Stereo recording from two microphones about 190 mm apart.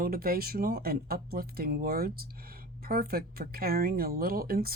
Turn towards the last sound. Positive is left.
turn(degrees=-50)  # may be behind; listen again after turning